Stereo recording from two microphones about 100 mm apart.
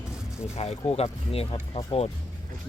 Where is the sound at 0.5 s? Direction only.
90° left.